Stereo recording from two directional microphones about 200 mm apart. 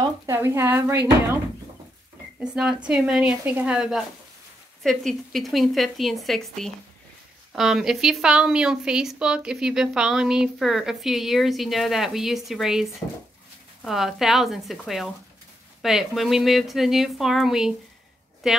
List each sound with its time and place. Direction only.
0.0 s speech: 15° right (ahead or behind)
2.4 s a woman's voice: 5° right (ahead or behind)
13.8 s a woman's voice: centre (ahead or behind)